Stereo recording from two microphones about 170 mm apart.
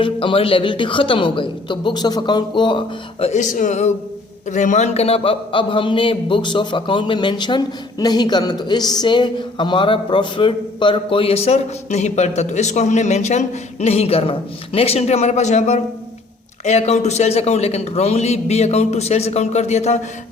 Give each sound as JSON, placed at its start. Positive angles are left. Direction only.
{"t": 0.0, "sound": "a woman's voice", "side_deg": 30}